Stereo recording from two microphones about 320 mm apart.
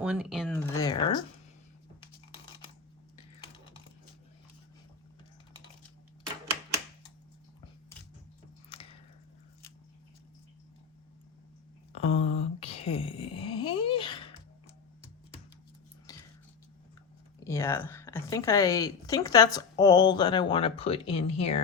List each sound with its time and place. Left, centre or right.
0.0 s speech: centre
8.7 s biting: centre
11.9 s a sound: centre
17.4 s a woman's voice: centre